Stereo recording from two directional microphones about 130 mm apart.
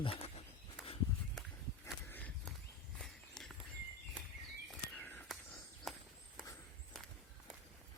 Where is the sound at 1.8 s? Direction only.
15° left (ahead or behind).